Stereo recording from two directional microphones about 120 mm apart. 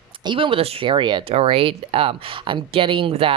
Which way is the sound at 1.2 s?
50° right (ahead or behind).